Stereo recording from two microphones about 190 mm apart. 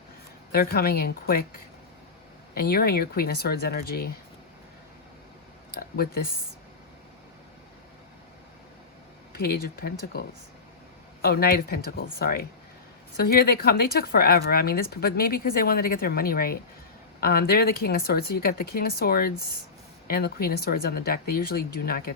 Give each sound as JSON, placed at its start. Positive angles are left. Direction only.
{"t": 0.5, "sound": "speech", "side_deg": 55}
{"t": 5.7, "sound": "speech", "side_deg": 55}
{"t": 9.3, "sound": "speech", "side_deg": 50}